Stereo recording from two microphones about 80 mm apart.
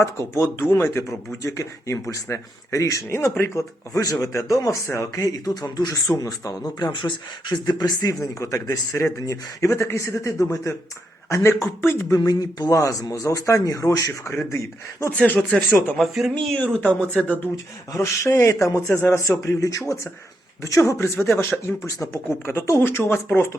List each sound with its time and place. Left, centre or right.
0.0 s speech: left
6.7 s speech: left
12.1 s speech: left
15.1 s speech: centre
16.0 s speech: centre
16.6 s speech: centre
17.9 s speech: left
21.2 s speech: left
21.8 s speech: left